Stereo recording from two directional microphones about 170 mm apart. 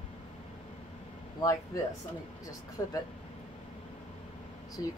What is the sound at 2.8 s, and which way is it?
Speech, 20° left (ahead or behind).